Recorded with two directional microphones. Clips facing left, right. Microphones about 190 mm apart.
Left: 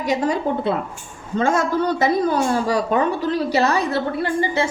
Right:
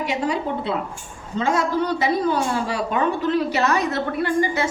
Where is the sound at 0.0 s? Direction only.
45° left (ahead or behind).